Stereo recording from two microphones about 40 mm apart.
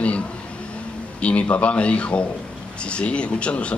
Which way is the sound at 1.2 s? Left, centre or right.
Left.